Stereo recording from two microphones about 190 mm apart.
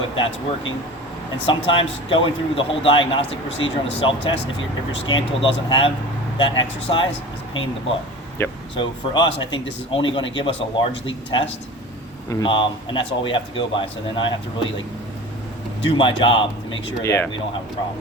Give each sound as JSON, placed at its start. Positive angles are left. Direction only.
{"t": 1.5, "sound": "a man's voice", "side_deg": 25}
{"t": 8.4, "sound": "speech", "side_deg": 15}
{"t": 8.7, "sound": "a man's voice", "side_deg": 25}
{"t": 15.8, "sound": "a man's voice", "side_deg": 25}
{"t": 17.0, "sound": "speech", "side_deg": 15}